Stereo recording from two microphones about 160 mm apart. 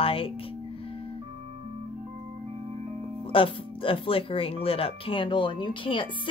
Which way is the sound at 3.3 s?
35° left (ahead or behind).